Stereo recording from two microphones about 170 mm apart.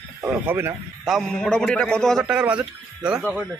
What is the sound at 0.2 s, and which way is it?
Speech, 15° right (ahead or behind).